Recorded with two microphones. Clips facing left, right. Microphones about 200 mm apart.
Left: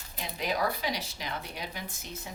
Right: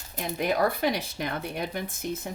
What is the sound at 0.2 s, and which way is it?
Speech, 55° right (ahead or behind).